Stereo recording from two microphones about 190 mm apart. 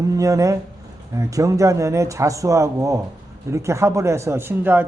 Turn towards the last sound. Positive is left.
turn(degrees=-10)  # may be behind; listen again after turning